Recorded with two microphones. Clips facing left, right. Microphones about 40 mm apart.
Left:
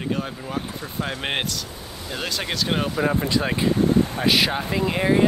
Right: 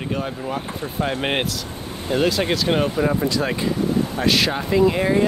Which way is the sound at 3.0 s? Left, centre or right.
Left.